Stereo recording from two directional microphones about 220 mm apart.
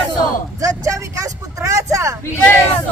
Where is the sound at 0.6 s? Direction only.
15° right (ahead or behind).